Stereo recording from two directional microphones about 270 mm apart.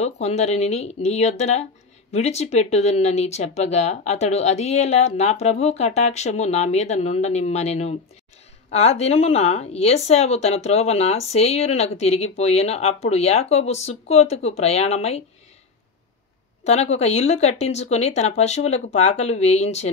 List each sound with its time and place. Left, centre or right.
0.0 s speech: left
16.6 s speech: left